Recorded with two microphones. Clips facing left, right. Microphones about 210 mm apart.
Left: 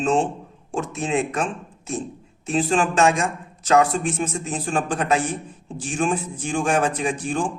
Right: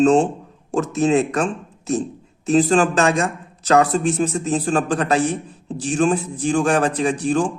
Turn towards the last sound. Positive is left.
turn(degrees=-40)  # may be behind; listen again after turning